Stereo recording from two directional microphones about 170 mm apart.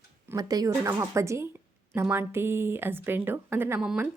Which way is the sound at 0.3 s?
20° right (ahead or behind).